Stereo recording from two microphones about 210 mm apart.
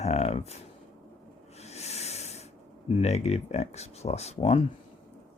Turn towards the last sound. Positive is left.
turn(degrees=30)  # may be behind; listen again after turning